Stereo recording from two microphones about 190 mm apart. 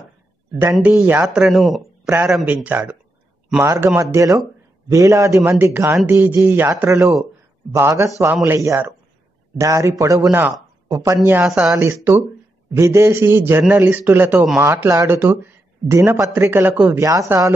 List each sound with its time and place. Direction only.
0.7 s a man's voice: 10° right (ahead or behind)